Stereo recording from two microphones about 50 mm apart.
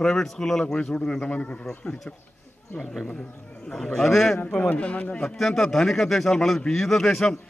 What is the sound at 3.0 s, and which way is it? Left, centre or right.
A man's voice, centre.